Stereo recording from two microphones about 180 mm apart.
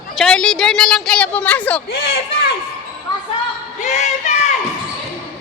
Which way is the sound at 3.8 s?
40° left (ahead or behind).